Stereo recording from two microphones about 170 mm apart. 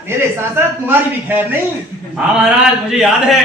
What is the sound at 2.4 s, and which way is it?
Speech, centre (ahead or behind).